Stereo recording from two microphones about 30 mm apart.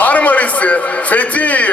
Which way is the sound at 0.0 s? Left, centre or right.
Left.